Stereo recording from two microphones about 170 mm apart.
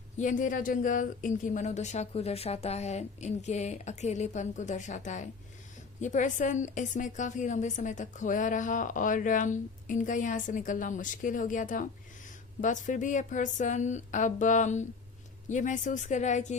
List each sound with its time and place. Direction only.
0.2 s a woman's voice: 50° left (ahead or behind)